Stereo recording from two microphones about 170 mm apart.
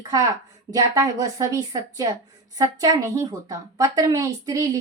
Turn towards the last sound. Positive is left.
turn(degrees=-20)  # may be behind; listen again after turning